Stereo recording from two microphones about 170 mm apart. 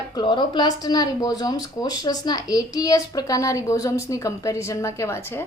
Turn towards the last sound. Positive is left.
turn(degrees=15)  # may be behind; listen again after turning